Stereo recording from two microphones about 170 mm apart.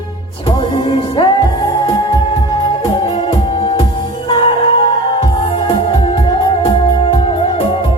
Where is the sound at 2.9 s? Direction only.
30° left (ahead or behind).